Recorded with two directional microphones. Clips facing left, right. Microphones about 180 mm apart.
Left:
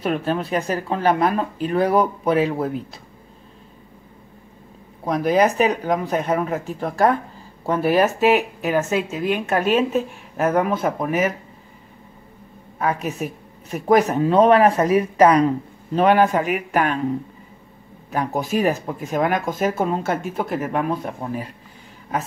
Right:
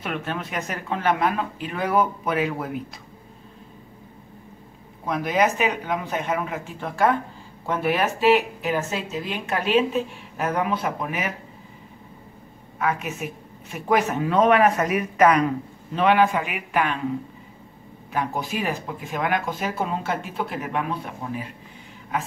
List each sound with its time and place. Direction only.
0.0 s speech: 35° left (ahead or behind)
5.0 s speech: 35° left (ahead or behind)
12.7 s speech: 35° left (ahead or behind)
18.1 s speech: 45° left (ahead or behind)